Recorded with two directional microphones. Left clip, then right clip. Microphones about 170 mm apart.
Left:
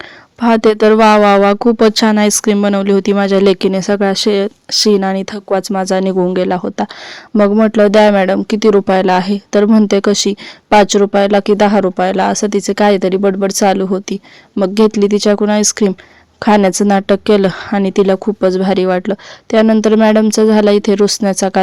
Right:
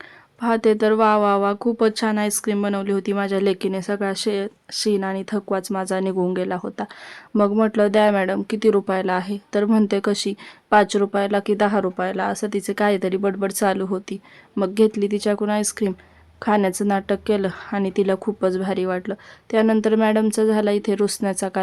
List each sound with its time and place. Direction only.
0.3 s speech: 45° left (ahead or behind)